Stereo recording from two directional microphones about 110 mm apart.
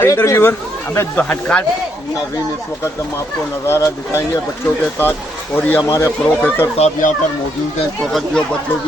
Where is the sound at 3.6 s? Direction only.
25° left (ahead or behind).